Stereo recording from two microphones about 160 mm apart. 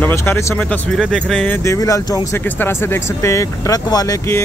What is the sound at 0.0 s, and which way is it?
Speech, 15° left (ahead or behind).